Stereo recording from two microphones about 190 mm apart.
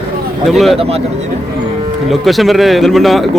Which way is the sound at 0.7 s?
30° right (ahead or behind).